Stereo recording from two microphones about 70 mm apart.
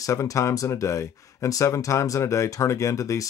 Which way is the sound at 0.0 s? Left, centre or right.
Left.